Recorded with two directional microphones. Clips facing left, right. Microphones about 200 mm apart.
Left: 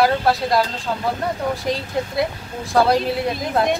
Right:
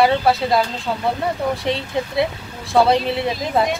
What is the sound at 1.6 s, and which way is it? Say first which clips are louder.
Speech: right 1 dB; centre (ahead or behind).